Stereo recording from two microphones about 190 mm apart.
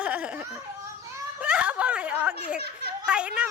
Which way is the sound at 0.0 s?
5° right (ahead or behind).